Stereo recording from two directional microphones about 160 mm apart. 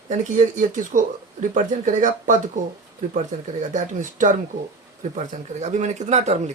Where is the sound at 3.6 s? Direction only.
50° right (ahead or behind).